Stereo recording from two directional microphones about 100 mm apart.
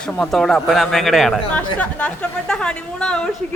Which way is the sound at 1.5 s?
15° left (ahead or behind).